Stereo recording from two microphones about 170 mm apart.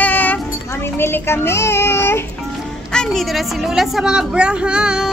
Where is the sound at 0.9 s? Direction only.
15° left (ahead or behind).